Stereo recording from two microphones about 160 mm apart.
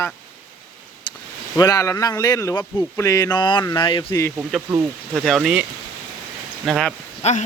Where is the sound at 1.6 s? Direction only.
20° left (ahead or behind).